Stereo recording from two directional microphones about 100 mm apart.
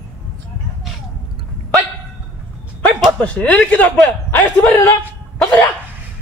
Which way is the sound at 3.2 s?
15° left (ahead or behind).